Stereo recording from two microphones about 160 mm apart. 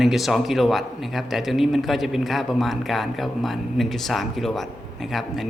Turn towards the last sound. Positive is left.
turn(degrees=0)  # may be behind; listen again after turning